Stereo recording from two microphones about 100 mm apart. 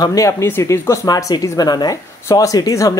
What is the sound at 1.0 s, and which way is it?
Speech, 40° left (ahead or behind).